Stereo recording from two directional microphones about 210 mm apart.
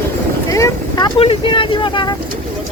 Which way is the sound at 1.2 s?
25° left (ahead or behind).